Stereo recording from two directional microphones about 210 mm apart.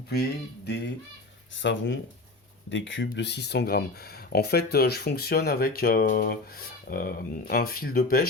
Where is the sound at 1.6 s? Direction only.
60° left (ahead or behind).